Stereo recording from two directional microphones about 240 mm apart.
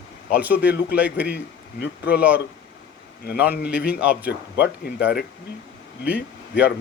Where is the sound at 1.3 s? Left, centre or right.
Left.